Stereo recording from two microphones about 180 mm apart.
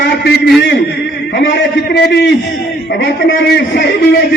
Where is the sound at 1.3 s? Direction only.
80° left.